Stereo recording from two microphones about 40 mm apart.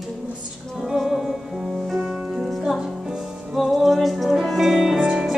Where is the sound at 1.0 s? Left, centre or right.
Centre.